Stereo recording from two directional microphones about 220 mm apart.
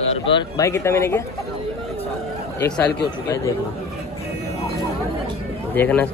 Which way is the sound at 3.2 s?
15° left (ahead or behind).